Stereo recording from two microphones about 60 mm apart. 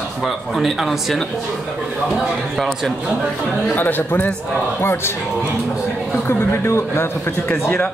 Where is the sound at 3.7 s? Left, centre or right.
Left.